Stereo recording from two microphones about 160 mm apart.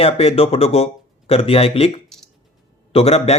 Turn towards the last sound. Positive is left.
turn(degrees=40)  # may be behind; listen again after turning